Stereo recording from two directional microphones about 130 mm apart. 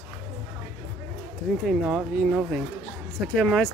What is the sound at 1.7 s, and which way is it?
Speech, centre (ahead or behind).